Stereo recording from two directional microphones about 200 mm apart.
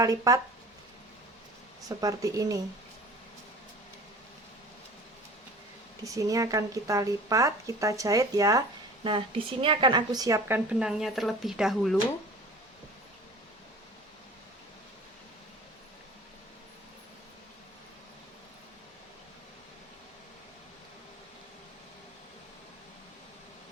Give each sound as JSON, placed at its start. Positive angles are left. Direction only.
{"t": 0.0, "sound": "a woman's voice", "side_deg": -15}
{"t": 1.9, "sound": "a woman's voice", "side_deg": -20}
{"t": 6.1, "sound": "a woman's voice", "side_deg": -15}